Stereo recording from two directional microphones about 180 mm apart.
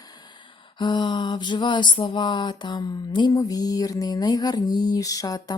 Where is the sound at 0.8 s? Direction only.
25° left (ahead or behind).